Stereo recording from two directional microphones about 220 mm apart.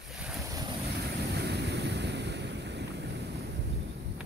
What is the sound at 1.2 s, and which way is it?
Waves, 50° right (ahead or behind).